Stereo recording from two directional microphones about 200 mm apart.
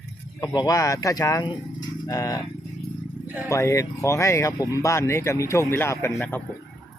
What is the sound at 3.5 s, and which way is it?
Speech, 15° left (ahead or behind).